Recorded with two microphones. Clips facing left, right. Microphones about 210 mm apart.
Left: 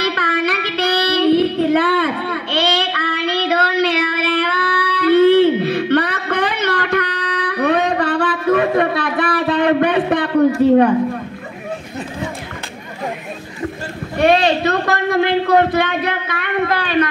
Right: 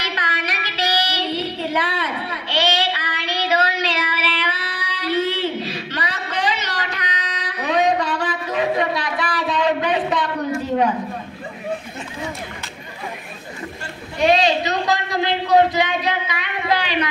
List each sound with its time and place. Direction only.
0.0 s child singing: 55° left (ahead or behind)
14.1 s a man's voice: 60° left (ahead or behind)